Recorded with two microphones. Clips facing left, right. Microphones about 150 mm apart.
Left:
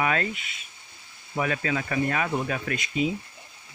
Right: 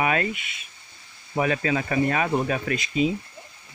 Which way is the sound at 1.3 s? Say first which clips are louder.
Right 4 dB; 30° right (ahead or behind).